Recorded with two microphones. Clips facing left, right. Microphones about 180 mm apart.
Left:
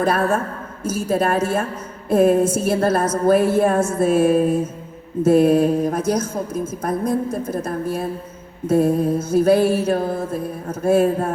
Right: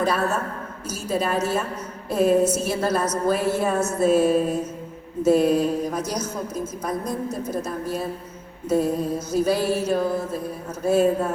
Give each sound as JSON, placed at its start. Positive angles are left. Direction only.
{"t": 0.0, "sound": "a woman's voice", "side_deg": 55}
{"t": 8.6, "sound": "mantra", "side_deg": 55}
{"t": 10.7, "sound": "a woman's voice", "side_deg": 55}